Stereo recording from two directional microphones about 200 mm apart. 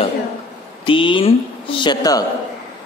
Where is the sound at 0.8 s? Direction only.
25° left (ahead or behind).